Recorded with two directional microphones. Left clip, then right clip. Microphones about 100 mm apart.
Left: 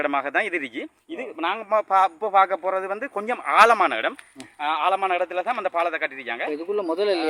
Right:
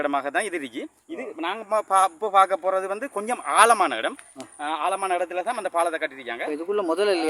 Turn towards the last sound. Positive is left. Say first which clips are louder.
# right 1 dB
turn(degrees=-30)  # may be behind; listen again after turning